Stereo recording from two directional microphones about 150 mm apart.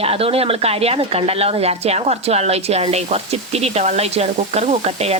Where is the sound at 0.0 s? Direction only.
40° right (ahead or behind).